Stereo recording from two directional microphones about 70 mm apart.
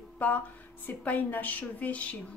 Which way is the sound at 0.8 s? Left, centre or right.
Left.